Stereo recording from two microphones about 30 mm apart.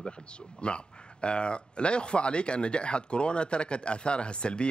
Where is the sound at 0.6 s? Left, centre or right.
Left.